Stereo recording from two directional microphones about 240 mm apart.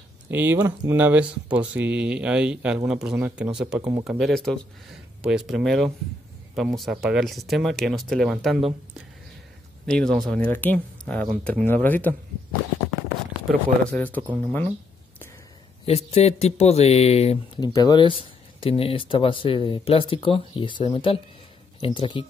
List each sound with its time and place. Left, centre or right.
0.3 s speech: centre
9.8 s speech: centre
13.5 s speech: centre
16.1 s speech: left